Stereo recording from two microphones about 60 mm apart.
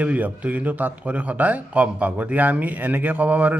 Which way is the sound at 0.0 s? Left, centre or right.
Right.